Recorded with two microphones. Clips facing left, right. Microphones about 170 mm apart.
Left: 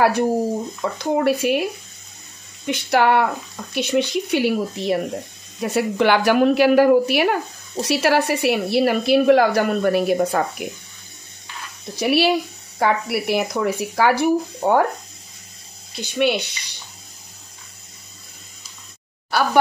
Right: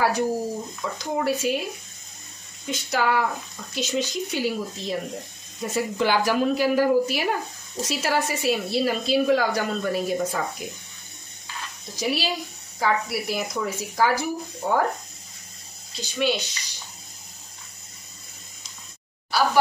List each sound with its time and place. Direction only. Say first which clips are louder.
0.0 s a woman's voice: left 5 dB; 60° left (ahead or behind)
12.0 s speech: left 9 dB; 65° left (ahead or behind)
15.9 s speech: left 5 dB; 60° left (ahead or behind)
19.3 s speech: left 2 dB; 55° left (ahead or behind)